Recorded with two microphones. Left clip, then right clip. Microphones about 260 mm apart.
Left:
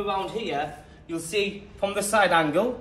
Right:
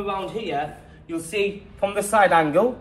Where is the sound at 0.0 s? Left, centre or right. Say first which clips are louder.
Right 1 dB; centre.